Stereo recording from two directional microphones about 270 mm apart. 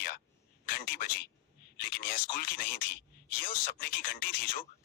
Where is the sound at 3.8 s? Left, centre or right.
Left.